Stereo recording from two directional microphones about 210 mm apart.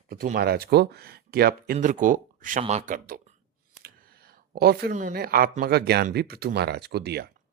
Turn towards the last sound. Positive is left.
turn(degrees=-50)  # may be behind; listen again after turning